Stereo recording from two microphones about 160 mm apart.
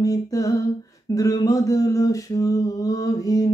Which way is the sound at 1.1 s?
20° left (ahead or behind).